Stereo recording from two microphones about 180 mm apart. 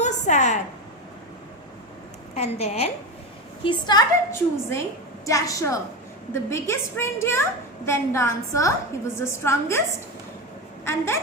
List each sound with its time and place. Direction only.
0.0 s a sound: 40° left (ahead or behind)
2.3 s a woman's voice: 35° left (ahead or behind)
3.6 s a woman's voice: 25° left (ahead or behind)
10.8 s a woman's voice: 15° left (ahead or behind)